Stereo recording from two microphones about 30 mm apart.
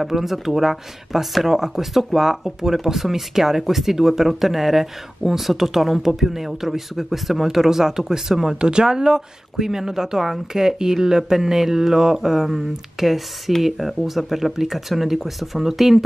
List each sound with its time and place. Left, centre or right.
0.1 s speech: centre
8.5 s speech: right; by 16.0 s centre